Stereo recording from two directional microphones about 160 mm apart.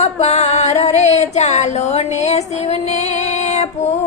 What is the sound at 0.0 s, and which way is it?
Music, 45° left (ahead or behind).